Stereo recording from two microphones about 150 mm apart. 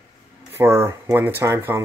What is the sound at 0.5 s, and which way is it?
Speech, 20° right (ahead or behind).